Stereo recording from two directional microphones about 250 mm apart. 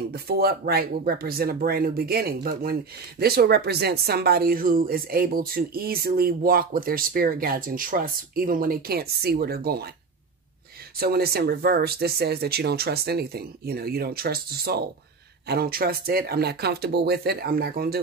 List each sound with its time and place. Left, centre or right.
0.1 s speech: right
11.0 s speech: right